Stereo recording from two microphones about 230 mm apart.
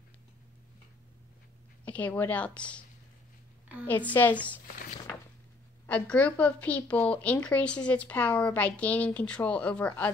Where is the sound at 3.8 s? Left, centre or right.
Centre.